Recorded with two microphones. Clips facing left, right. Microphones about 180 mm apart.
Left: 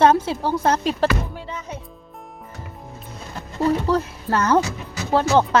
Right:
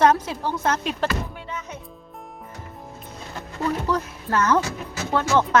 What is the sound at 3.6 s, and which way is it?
Speech, 30° left (ahead or behind).